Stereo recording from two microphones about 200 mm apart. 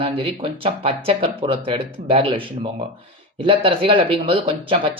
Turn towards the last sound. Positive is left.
turn(degrees=-25)  # may be behind; listen again after turning